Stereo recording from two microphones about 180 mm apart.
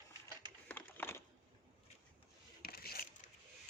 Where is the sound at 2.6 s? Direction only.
60° left (ahead or behind).